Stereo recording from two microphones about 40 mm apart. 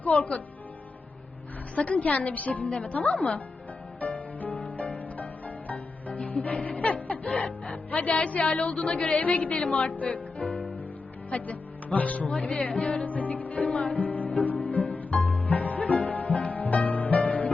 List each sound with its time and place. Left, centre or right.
0.0 s a woman's voice: left
1.7 s music: left
4.0 s music: left
4.6 s harp: left
5.1 s music: left
9.9 s music: left